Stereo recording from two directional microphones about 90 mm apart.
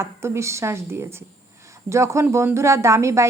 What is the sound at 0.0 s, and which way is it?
Speech, 30° right (ahead or behind).